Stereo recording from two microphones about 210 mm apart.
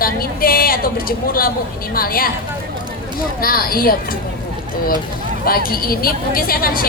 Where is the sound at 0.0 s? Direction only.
45° left (ahead or behind).